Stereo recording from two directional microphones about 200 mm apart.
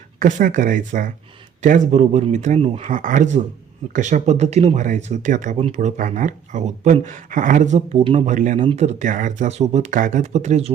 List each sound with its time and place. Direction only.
0.2 s speech: 40° right (ahead or behind)